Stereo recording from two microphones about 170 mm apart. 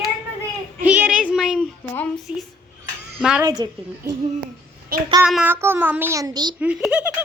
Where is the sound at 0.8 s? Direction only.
10° right (ahead or behind).